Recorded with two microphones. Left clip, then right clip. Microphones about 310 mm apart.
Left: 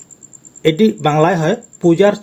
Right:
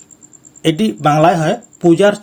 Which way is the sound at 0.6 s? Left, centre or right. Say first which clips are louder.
Left 3 dB; right.